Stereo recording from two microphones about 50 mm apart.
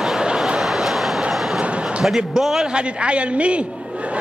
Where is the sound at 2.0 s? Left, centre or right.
Centre.